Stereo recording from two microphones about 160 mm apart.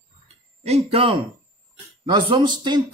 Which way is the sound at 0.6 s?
40° right (ahead or behind).